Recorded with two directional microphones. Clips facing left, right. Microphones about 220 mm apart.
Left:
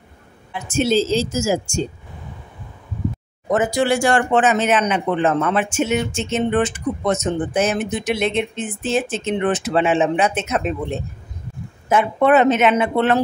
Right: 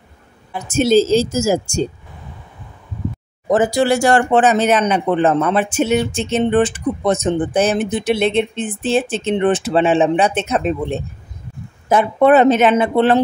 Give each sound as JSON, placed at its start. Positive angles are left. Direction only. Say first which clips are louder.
{"t": 0.5, "sound": "speech", "louder": "right 4 dB", "side_deg": -40}
{"t": 3.4, "sound": "speech", "louder": "right 3 dB", "side_deg": -35}